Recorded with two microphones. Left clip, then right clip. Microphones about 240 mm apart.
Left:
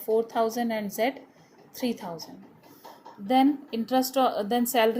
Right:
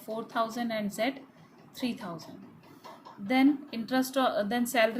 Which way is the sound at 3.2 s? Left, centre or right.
Centre.